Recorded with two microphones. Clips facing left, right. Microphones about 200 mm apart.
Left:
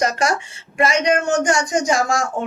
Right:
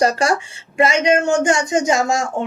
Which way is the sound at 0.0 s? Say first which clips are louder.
Right 3 dB; 30° right (ahead or behind).